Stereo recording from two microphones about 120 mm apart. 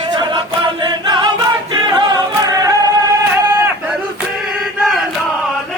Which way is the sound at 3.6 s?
15° right (ahead or behind).